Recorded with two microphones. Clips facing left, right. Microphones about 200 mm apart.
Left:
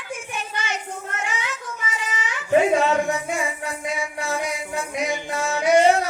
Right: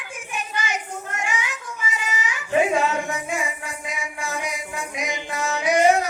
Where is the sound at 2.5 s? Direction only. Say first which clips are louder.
Left 3 dB; 35° left (ahead or behind).